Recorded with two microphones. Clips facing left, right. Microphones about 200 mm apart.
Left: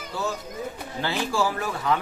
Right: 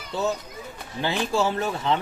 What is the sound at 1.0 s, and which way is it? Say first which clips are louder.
Speech: right 2 dB; 20° right (ahead or behind).